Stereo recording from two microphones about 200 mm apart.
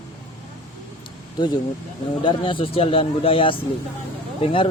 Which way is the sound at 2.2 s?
25° left (ahead or behind).